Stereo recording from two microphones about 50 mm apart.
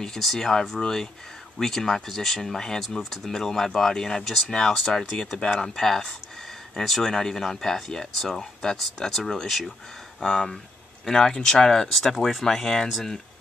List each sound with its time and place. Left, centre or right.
0.0 s speech: centre
11.9 s speech: centre